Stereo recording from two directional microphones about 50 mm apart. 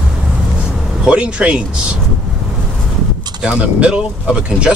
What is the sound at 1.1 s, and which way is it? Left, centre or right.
Speech, right.